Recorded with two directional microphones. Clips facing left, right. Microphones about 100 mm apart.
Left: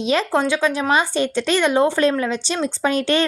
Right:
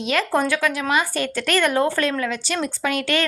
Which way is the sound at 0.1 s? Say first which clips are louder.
Left 2 dB; 20° left (ahead or behind).